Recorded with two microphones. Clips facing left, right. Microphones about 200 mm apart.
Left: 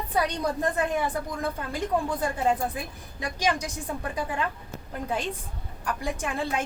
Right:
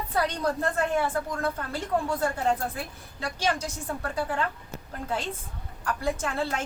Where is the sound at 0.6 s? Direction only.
15° left (ahead or behind).